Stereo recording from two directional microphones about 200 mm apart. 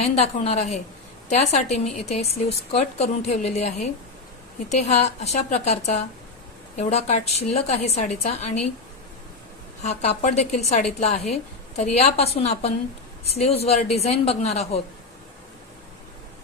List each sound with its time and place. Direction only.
0.0 s a woman's voice: 30° left (ahead or behind)
9.8 s a woman's voice: 35° left (ahead or behind)